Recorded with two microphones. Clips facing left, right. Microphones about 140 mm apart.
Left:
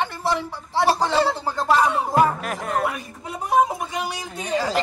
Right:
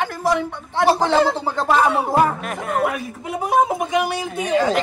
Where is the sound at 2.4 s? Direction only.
Centre (ahead or behind).